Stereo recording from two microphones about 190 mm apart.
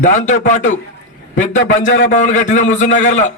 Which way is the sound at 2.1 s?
40° left (ahead or behind).